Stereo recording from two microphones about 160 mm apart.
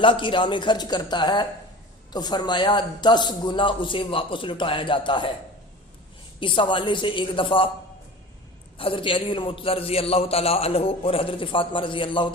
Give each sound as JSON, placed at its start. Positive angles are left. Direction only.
{"t": 0.0, "sound": "a man's voice", "side_deg": 30}
{"t": 6.4, "sound": "a man's voice", "side_deg": 30}
{"t": 8.8, "sound": "a man's voice", "side_deg": 35}